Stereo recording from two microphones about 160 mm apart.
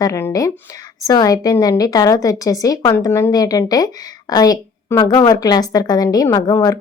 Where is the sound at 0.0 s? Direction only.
15° left (ahead or behind).